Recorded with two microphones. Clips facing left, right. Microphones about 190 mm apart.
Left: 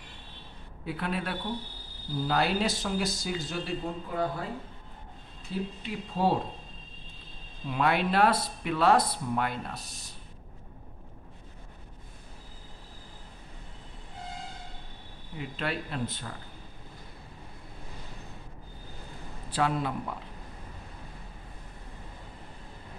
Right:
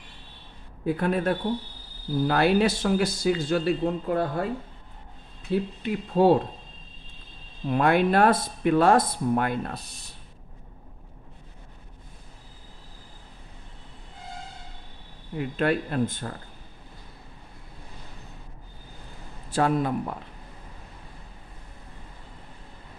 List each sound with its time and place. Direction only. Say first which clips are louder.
0.8 s speech: right 9 dB; 45° right (ahead or behind)
2.2 s speech: right 6 dB; 60° right (ahead or behind)
5.5 s speech: right 8 dB; 60° right (ahead or behind)
7.6 s speech: right 6 dB; 50° right (ahead or behind)
15.3 s speech: right 9 dB; 50° right (ahead or behind)
19.5 s speech: right 5 dB; 45° right (ahead or behind)